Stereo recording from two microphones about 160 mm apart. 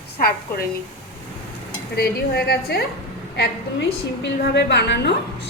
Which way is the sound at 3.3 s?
90° left.